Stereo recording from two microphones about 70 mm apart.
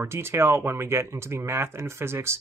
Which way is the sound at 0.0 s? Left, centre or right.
Right.